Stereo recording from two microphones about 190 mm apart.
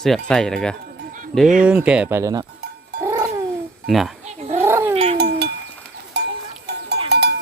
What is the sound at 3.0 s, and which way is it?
Music, 15° right (ahead or behind).